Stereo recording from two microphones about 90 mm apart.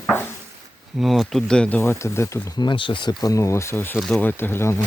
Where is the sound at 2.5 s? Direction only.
60° left (ahead or behind).